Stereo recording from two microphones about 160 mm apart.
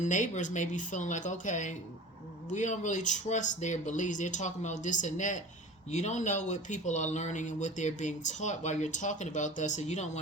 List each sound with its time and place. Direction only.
0.0 s speech: 50° left (ahead or behind)